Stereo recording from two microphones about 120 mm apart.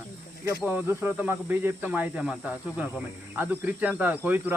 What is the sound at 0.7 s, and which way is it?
Speech, 15° right (ahead or behind).